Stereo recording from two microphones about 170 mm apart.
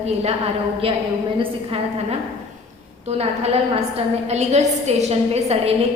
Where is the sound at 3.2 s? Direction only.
35° right (ahead or behind).